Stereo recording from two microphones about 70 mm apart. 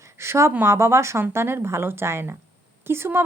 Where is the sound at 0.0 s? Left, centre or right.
Right.